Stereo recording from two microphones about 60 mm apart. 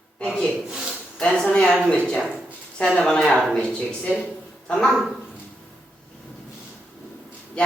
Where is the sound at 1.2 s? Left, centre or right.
Centre.